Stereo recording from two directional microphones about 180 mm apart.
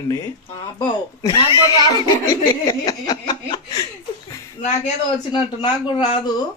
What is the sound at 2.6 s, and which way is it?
Speech, 20° left (ahead or behind).